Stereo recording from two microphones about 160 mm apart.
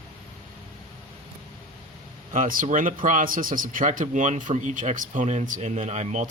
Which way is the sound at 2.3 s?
55° right (ahead or behind).